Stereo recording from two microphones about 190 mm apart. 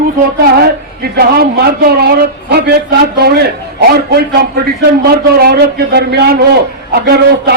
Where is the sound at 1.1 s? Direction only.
55° right (ahead or behind).